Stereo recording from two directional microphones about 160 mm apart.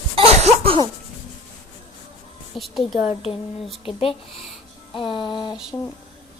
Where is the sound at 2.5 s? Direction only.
Centre (ahead or behind).